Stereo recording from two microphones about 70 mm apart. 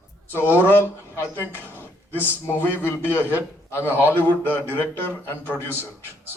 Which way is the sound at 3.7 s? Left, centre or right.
Left.